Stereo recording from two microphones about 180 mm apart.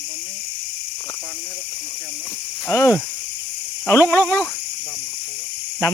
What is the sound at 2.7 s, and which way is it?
Speech, 15° left (ahead or behind).